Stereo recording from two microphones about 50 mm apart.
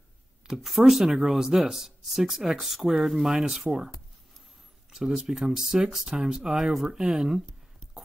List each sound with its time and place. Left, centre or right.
0.6 s speech: centre
4.9 s speech: centre